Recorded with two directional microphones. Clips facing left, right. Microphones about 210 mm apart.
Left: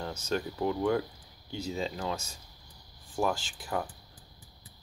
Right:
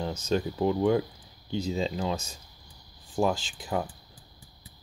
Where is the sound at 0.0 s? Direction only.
20° right (ahead or behind).